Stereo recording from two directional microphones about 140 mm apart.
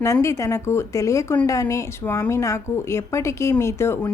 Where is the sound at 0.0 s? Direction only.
20° left (ahead or behind).